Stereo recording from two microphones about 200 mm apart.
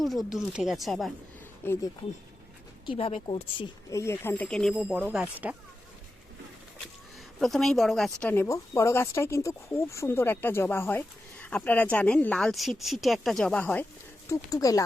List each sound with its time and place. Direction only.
0.0 s speech: centre (ahead or behind)
1.6 s speech: 15° left (ahead or behind)
2.8 s speech: 25° left (ahead or behind); by 5.5 s 10° right (ahead or behind)
7.3 s speech: centre (ahead or behind); by 14.8 s 15° left (ahead or behind)